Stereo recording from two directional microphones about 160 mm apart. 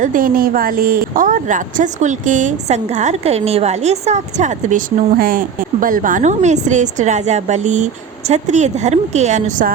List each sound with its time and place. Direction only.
0.0 s a woman's voice: 60° right (ahead or behind)